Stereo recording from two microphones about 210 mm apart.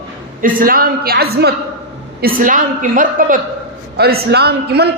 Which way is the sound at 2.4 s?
40° right (ahead or behind).